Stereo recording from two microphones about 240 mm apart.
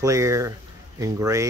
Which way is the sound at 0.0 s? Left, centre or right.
Centre.